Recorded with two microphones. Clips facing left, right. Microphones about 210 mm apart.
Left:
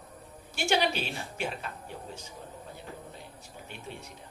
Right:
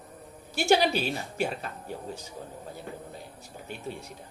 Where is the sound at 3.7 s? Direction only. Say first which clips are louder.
Right 6 dB; 40° right (ahead or behind).